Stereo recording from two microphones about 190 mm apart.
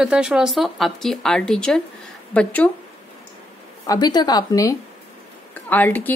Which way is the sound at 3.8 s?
20° left (ahead or behind).